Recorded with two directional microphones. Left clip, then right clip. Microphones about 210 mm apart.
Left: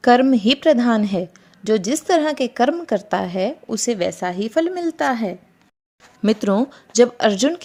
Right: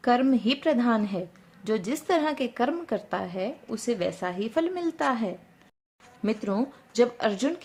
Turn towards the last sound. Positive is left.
turn(degrees=35)  # may be behind; listen again after turning